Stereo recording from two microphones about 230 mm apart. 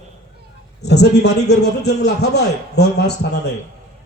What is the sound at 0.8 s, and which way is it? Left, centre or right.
A man's voice, left.